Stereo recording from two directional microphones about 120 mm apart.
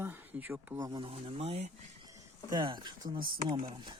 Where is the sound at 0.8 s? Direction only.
35° right (ahead or behind).